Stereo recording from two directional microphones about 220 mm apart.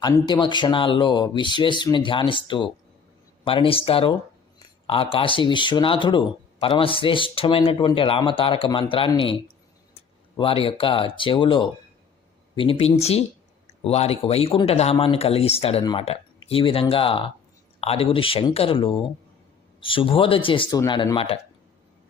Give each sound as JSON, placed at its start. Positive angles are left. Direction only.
{"t": 0.0, "sound": "speech", "side_deg": 20}